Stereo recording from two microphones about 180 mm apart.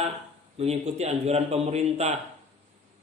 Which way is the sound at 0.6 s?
35° right (ahead or behind).